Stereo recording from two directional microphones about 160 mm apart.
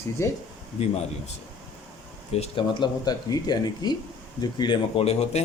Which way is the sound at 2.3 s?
35° left (ahead or behind).